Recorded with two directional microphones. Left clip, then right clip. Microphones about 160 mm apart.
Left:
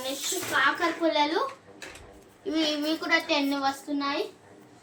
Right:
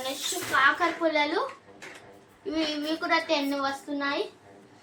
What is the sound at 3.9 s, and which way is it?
Speech, 15° left (ahead or behind).